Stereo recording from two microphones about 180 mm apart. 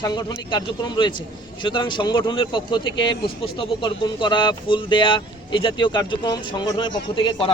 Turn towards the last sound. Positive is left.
turn(degrees=25)  # may be behind; listen again after turning